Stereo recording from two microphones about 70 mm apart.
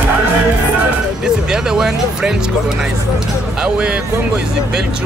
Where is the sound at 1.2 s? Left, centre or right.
Centre.